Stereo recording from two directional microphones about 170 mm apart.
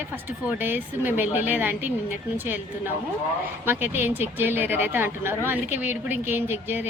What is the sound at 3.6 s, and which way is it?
A woman's voice, 10° right (ahead or behind).